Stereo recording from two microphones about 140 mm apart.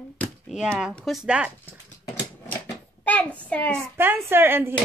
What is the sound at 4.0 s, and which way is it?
Speech, 15° right (ahead or behind).